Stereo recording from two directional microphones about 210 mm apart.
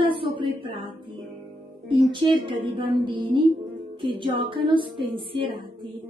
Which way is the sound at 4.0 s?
25° right (ahead or behind).